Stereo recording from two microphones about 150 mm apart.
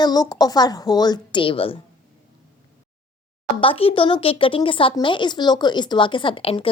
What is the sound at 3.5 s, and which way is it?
Speech, 35° left (ahead or behind).